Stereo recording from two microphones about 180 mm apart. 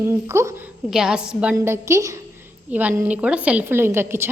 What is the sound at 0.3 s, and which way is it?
Speech, 15° right (ahead or behind).